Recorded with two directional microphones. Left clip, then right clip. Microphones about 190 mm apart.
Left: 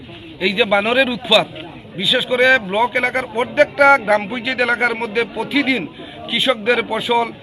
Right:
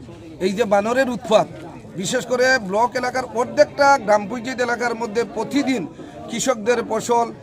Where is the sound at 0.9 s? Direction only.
5° left (ahead or behind).